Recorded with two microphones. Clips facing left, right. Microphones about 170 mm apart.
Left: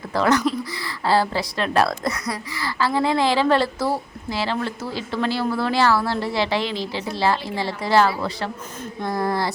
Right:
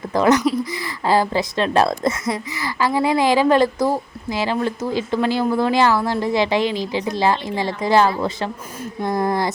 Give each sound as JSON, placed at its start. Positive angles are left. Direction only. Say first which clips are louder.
{"t": 0.1, "sound": "a woman's voice", "louder": "right 3 dB", "side_deg": -20}